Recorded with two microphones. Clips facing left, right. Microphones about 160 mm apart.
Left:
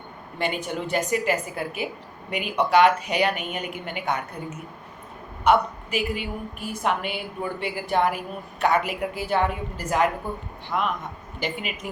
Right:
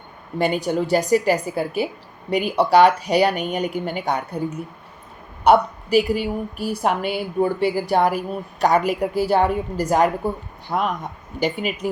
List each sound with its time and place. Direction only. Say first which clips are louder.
0.3 s a woman's voice: right 7 dB; 40° right (ahead or behind)